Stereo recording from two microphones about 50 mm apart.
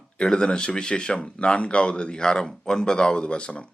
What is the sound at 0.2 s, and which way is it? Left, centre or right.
Speech, centre.